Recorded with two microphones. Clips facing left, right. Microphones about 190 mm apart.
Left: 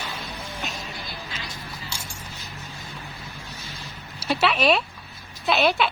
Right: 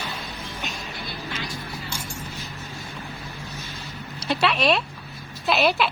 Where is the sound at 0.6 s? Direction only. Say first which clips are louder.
Even; centre (ahead or behind).